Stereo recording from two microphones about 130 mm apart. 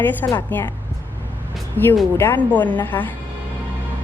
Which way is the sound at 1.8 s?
15° left (ahead or behind).